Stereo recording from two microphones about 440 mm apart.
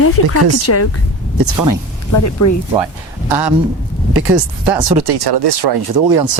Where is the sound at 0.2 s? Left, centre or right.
Left.